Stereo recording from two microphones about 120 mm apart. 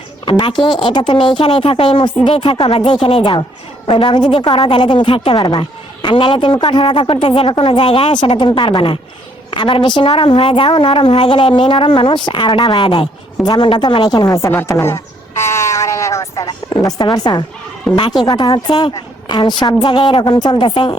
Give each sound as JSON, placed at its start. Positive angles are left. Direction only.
{"t": 0.3, "sound": "a woman's voice", "side_deg": 40}
{"t": 3.0, "sound": "a woman's voice", "side_deg": 60}
{"t": 3.8, "sound": "a woman's voice", "side_deg": 40}